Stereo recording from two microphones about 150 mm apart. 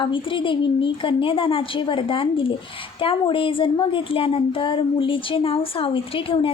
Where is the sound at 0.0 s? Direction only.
35° left (ahead or behind).